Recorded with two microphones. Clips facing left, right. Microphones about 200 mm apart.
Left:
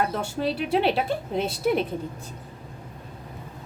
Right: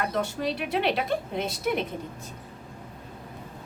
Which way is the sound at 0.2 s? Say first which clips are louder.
Left 2 dB; 30° left (ahead or behind).